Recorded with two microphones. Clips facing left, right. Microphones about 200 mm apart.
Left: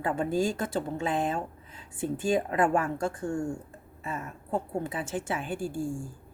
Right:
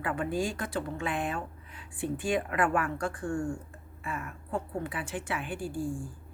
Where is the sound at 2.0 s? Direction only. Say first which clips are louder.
Left 3 dB; 40° left (ahead or behind).